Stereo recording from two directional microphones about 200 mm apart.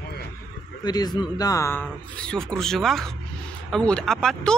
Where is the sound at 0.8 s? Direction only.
20° left (ahead or behind).